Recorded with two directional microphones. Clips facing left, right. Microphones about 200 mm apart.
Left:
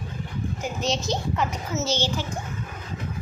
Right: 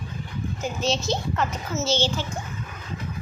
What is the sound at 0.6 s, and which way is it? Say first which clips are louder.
A woman's voice: right 2 dB; 15° left (ahead or behind).